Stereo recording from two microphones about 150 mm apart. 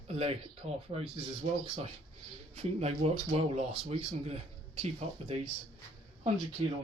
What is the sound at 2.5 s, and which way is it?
Speech, 45° right (ahead or behind).